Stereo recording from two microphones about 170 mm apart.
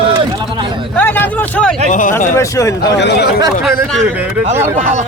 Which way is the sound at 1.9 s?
50° left (ahead or behind).